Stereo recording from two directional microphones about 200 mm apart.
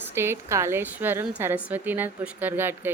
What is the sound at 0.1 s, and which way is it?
Speech, 10° right (ahead or behind).